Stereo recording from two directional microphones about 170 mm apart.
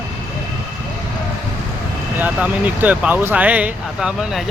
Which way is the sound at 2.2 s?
10° right (ahead or behind).